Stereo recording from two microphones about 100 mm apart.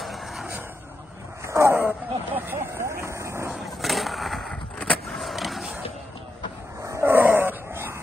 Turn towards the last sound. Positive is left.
turn(degrees=-25)  # may be behind; listen again after turning